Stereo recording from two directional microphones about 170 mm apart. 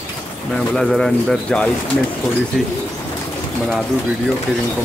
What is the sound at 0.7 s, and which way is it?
Speech, 5° left (ahead or behind).